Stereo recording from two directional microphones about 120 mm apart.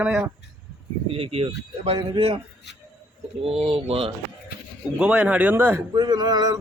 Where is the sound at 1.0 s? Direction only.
50° right (ahead or behind).